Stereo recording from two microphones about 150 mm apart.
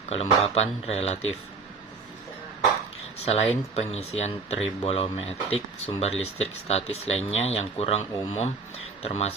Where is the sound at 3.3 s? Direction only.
45° left (ahead or behind).